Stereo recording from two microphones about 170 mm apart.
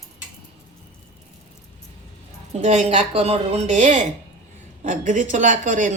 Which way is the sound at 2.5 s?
40° right (ahead or behind).